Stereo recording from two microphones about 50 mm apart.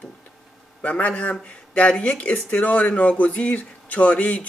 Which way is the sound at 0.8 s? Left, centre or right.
Left.